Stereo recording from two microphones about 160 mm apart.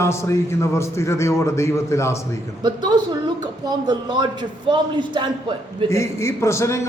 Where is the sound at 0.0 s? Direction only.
15° left (ahead or behind).